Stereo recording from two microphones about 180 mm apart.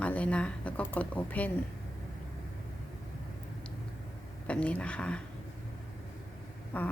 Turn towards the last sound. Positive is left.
turn(degrees=10)  # may be behind; listen again after turning